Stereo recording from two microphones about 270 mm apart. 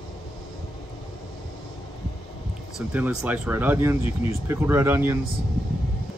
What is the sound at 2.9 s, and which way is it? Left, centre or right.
Speech, centre.